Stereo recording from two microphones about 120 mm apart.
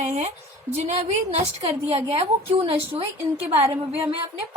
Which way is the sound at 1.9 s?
55° right (ahead or behind).